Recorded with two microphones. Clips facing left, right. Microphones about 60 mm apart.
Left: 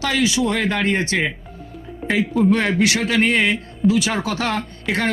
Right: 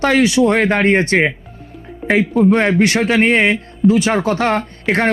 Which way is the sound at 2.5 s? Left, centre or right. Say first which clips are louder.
Right 5 dB; right.